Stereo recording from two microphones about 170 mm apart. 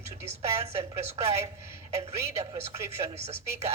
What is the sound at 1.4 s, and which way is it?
Speech, 15° right (ahead or behind).